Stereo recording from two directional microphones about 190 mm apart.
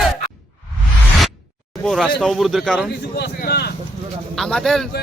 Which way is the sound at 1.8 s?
5° left (ahead or behind).